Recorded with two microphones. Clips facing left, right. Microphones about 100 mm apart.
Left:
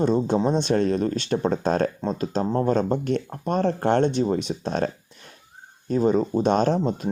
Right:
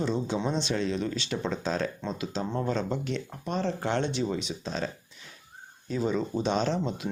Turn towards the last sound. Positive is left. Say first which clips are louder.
# left 7 dB
turn(degrees=45)  # may be behind; listen again after turning